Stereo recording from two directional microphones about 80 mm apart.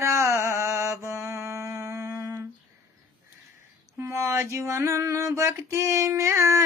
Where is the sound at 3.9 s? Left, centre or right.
Right.